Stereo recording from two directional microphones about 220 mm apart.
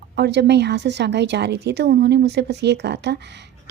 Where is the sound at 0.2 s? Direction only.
50° right (ahead or behind).